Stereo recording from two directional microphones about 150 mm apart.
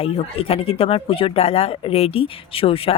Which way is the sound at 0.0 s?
40° left (ahead or behind).